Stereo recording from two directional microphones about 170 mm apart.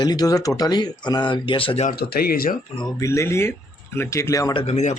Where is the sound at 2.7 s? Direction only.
25° left (ahead or behind).